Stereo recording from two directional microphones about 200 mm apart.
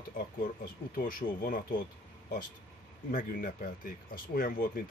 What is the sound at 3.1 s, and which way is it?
Speech, 40° left (ahead or behind).